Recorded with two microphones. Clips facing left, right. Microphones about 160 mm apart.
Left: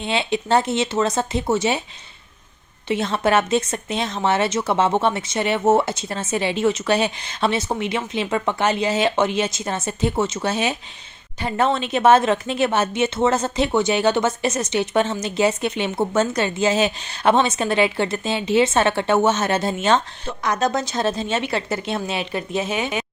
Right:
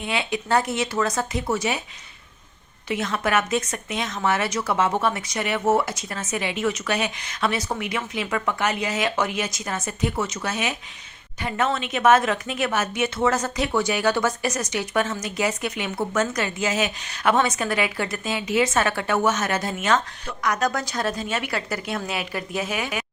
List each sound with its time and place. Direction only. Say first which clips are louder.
0.0 s speech: left 4 dB; 25° left (ahead or behind)
2.8 s speech: left 5 dB; 30° left (ahead or behind)